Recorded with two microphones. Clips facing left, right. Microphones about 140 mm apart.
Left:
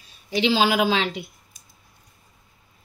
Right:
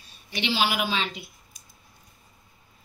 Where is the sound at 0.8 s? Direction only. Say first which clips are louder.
Left 6 dB; 85° left.